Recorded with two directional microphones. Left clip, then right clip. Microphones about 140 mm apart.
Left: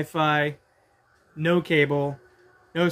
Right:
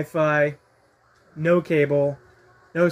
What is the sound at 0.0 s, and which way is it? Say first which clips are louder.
A man's voice: right 3 dB; 10° left (ahead or behind).